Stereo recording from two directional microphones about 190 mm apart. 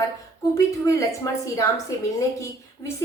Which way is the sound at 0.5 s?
15° left (ahead or behind).